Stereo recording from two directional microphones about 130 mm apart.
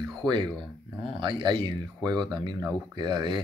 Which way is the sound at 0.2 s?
35° right (ahead or behind).